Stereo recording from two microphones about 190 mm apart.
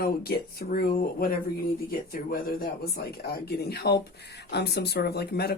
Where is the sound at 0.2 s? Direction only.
55° left (ahead or behind).